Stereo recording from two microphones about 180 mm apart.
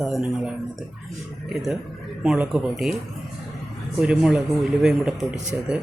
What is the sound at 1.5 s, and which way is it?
Speech, centre (ahead or behind).